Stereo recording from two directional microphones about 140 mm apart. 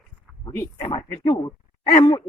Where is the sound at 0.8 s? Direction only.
35° left (ahead or behind).